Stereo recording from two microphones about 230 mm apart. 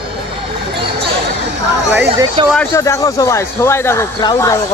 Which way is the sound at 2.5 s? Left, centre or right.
Centre.